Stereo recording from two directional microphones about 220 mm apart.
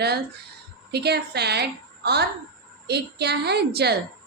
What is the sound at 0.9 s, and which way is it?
Speech, 50° right (ahead or behind).